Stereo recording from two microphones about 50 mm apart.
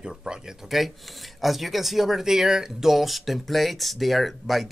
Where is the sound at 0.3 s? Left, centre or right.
Centre.